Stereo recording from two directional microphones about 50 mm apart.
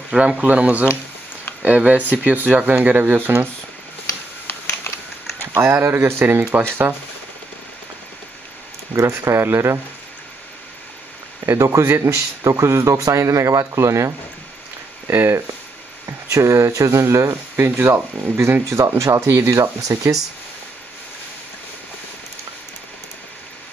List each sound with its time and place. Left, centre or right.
0.4 s speech: right
5.4 s speech: right
6.2 s speech: right
8.9 s speech: right
11.4 s a man's voice: right
11.8 s a man's voice: right
15.0 s speech: right
16.3 s a man's voice: right
17.6 s speech: right